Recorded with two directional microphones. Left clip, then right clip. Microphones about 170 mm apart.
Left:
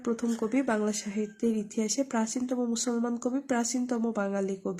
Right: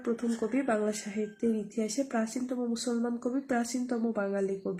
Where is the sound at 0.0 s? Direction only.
45° left (ahead or behind).